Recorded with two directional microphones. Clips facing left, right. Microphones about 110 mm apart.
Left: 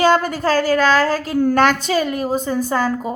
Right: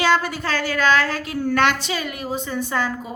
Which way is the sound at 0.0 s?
45° left (ahead or behind).